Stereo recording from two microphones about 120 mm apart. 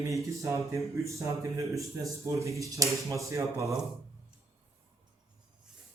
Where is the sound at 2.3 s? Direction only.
25° right (ahead or behind).